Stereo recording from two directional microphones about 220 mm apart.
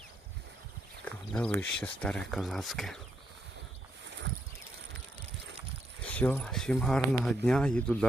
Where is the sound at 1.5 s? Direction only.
5° left (ahead or behind).